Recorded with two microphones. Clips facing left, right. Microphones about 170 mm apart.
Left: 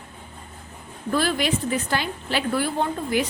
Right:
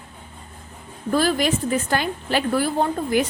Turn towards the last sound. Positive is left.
turn(degrees=-40)  # may be behind; listen again after turning